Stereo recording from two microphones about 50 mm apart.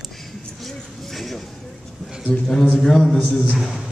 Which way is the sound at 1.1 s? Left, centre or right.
Centre.